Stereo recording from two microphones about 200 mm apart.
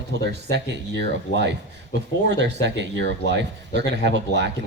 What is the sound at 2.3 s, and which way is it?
Speech, 60° right (ahead or behind).